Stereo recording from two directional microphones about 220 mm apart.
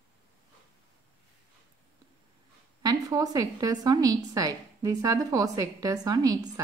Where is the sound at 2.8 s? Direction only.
15° right (ahead or behind).